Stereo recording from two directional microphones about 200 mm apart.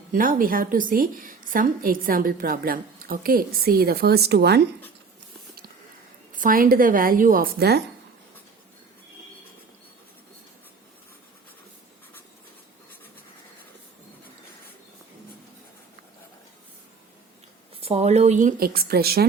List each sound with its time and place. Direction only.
0.1 s a woman's voice: 45° right (ahead or behind)
6.3 s a woman's voice: 45° right (ahead or behind)
17.7 s speech: 30° right (ahead or behind); by 19.3 s 50° right (ahead or behind)